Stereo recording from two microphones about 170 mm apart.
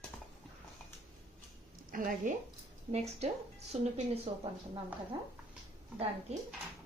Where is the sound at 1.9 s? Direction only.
55° right (ahead or behind).